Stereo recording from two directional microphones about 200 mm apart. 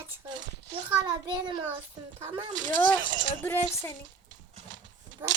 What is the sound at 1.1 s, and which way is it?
Speech, 20° right (ahead or behind).